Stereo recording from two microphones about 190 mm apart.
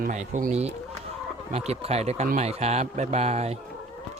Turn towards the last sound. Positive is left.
turn(degrees=-35)  # may be behind; listen again after turning